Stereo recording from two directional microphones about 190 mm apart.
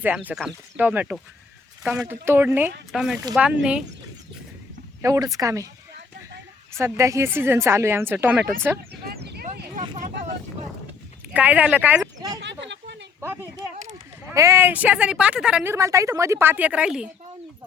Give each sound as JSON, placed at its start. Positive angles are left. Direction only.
{"t": 0.0, "sound": "speech", "side_deg": -10}
{"t": 5.0, "sound": "speech", "side_deg": -15}
{"t": 6.7, "sound": "speech", "side_deg": -15}
{"t": 9.0, "sound": "a sound", "side_deg": -60}
{"t": 11.3, "sound": "speech", "side_deg": -10}
{"t": 12.4, "sound": "a sound", "side_deg": -70}
{"t": 14.3, "sound": "speech", "side_deg": -15}